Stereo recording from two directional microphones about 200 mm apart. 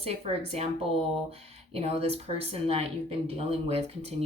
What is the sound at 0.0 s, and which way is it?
Speech, 30° right (ahead or behind).